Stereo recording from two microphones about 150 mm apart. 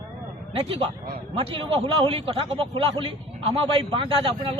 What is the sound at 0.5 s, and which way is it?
A man's voice, 40° right (ahead or behind).